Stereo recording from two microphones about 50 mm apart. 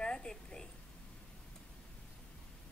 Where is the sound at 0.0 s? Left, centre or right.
Centre.